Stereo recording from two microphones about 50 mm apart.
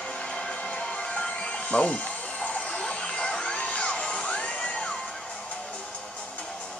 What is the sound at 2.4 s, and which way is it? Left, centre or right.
Music, centre.